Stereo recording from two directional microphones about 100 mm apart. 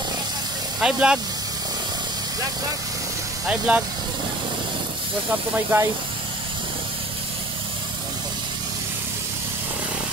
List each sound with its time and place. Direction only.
0.7 s speech: 5° right (ahead or behind)
3.4 s speech: 10° right (ahead or behind)
5.5 s speech: 20° right (ahead or behind)